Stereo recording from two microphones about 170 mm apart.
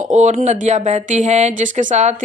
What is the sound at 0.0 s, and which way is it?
Speech, 45° right (ahead or behind).